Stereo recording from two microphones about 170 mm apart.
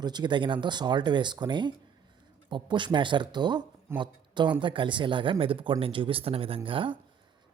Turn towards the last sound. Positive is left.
turn(degrees=-30)  # may be behind; listen again after turning